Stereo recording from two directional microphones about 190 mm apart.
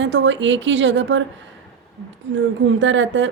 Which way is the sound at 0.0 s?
75° right (ahead or behind).